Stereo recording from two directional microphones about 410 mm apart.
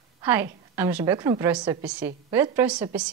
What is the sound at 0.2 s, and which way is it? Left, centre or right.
A woman's voice, centre.